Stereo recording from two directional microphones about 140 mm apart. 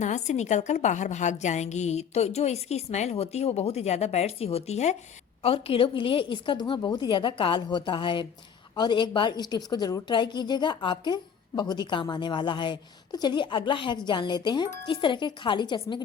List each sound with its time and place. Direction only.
0.0 s a woman's voice: 55° left (ahead or behind); by 16.0 s 35° left (ahead or behind)